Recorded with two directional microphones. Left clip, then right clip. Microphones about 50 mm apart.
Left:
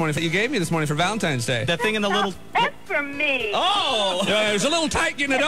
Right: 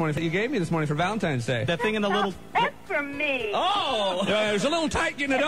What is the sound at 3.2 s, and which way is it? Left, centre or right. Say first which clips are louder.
Speech: left 4 dB; left.